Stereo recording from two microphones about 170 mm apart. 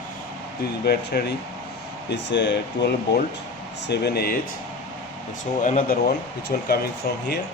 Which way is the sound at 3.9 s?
70° left (ahead or behind).